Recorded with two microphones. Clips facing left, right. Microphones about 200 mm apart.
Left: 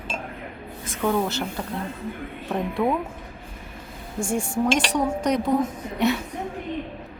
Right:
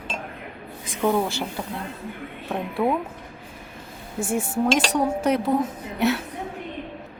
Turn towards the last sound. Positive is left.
turn(degrees=-5)  # may be behind; listen again after turning